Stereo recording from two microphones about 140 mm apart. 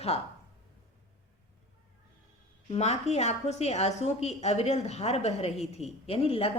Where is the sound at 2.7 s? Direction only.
50° left (ahead or behind).